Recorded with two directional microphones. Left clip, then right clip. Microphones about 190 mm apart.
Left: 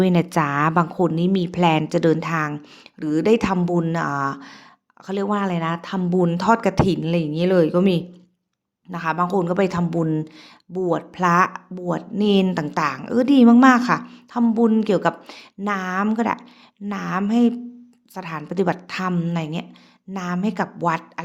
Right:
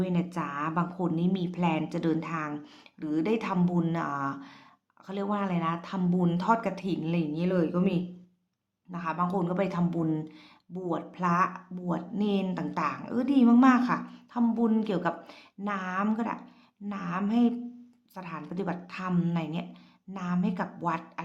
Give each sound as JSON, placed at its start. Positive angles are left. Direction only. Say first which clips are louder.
{"t": 0.0, "sound": "speech", "louder": "left 13 dB", "side_deg": 50}